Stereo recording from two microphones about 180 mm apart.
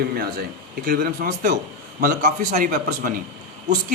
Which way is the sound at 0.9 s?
55° right (ahead or behind).